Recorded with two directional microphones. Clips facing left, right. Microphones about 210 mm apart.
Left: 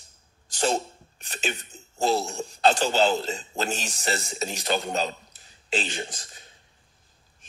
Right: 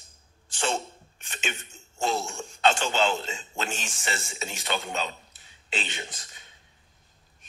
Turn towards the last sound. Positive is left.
turn(degrees=35)  # may be behind; listen again after turning